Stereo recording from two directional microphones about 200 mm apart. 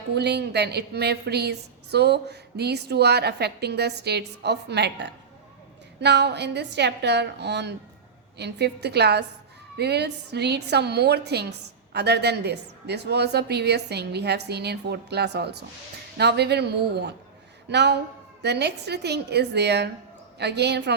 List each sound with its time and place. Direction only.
0.1 s a woman's voice: 55° right (ahead or behind)